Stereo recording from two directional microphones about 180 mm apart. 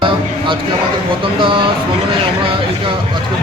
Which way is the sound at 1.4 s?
30° right (ahead or behind).